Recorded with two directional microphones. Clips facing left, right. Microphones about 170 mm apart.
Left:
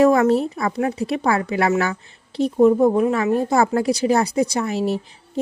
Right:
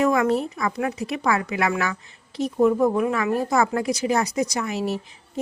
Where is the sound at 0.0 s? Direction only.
35° left (ahead or behind).